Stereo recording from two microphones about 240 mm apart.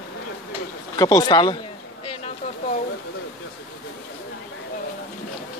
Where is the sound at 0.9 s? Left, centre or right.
Centre.